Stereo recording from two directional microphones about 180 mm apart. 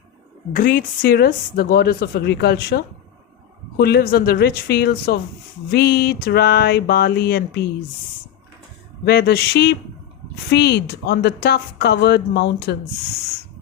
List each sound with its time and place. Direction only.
0.5 s a woman's voice: 50° left (ahead or behind)
9.0 s a woman's voice: 60° left (ahead or behind)